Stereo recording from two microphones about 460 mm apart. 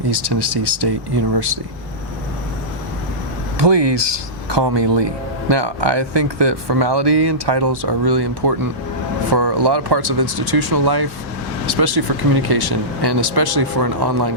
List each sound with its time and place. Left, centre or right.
0.1 s speech: right
3.6 s speech: right